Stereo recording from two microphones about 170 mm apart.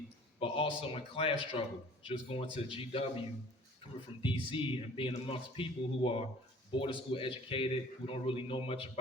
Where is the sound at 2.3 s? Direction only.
30° left (ahead or behind).